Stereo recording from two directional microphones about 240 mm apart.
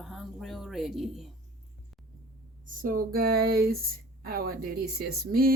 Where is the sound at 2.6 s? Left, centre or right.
Right.